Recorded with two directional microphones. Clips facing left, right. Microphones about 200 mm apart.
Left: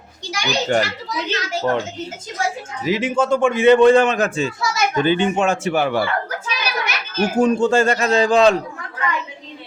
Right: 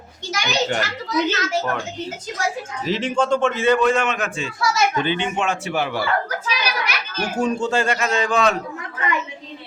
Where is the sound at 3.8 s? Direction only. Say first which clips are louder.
Left 7 dB; 35° left (ahead or behind).